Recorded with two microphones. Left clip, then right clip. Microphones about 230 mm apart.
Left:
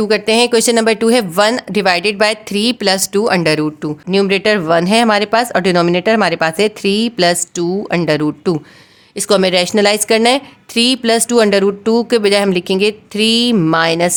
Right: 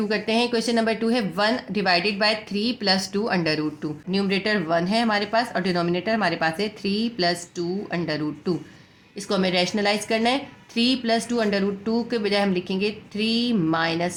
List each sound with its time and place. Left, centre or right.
0.0 s speech: left